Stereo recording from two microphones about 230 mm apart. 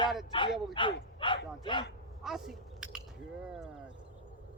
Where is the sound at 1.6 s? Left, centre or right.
Centre.